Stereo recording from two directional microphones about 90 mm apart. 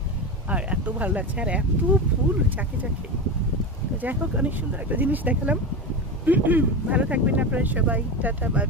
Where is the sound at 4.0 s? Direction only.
20° right (ahead or behind).